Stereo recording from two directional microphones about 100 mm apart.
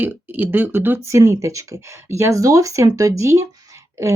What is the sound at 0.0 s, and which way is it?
Speech, 15° right (ahead or behind).